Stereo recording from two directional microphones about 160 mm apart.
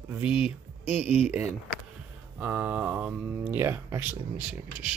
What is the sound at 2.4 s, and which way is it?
Speech, 10° right (ahead or behind).